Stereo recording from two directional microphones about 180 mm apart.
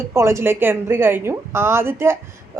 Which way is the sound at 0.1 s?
15° right (ahead or behind).